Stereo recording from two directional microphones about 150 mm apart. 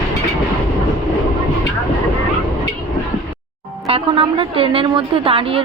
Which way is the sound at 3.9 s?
35° right (ahead or behind).